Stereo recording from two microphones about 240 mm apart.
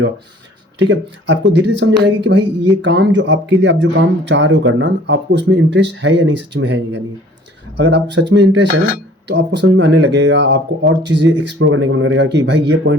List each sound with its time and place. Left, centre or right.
0.8 s speech: right